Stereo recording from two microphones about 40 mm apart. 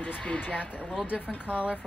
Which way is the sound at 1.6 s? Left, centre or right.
Right.